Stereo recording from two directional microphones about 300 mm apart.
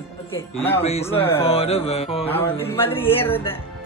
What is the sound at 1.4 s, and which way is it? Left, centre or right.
Music, centre.